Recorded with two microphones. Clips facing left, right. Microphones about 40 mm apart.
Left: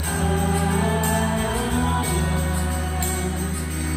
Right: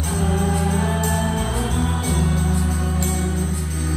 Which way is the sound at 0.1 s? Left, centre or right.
Centre.